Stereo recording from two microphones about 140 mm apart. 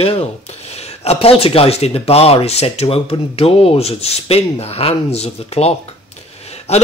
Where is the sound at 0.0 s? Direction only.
45° left (ahead or behind).